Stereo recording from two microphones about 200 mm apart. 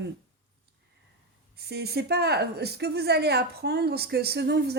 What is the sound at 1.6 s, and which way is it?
A woman's voice, 55° right (ahead or behind).